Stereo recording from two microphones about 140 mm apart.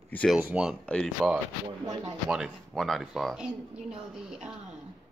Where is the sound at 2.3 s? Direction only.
Centre (ahead or behind).